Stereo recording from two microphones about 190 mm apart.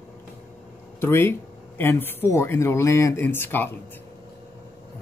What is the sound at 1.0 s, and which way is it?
Speech, 10° left (ahead or behind).